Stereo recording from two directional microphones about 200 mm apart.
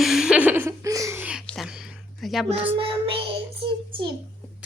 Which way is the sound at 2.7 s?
25° right (ahead or behind).